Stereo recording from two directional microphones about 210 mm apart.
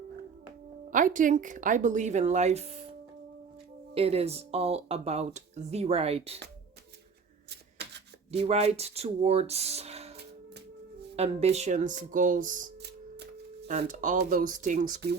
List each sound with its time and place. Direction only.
0.9 s speech: 40° right (ahead or behind)
3.9 s speech: 30° right (ahead or behind)
8.3 s speech: 30° right (ahead or behind)
11.2 s speech: 30° right (ahead or behind)